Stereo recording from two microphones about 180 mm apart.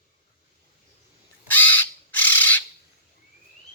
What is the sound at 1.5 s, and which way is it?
Crow, 10° left (ahead or behind).